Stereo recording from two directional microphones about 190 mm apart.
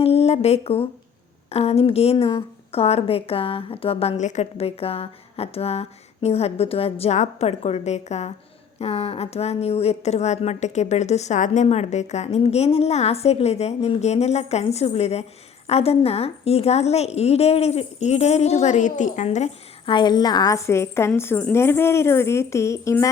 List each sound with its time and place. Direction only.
0.0 s a woman's voice: 35° left (ahead or behind); by 23.0 s 15° left (ahead or behind)